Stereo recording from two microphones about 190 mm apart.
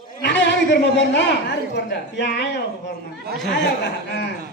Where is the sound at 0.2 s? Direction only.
65° left (ahead or behind).